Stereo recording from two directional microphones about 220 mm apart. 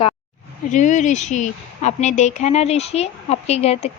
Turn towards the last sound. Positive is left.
turn(degrees=30)  # may be behind; listen again after turning